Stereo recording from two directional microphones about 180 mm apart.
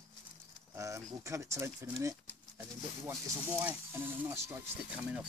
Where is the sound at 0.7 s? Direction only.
15° right (ahead or behind).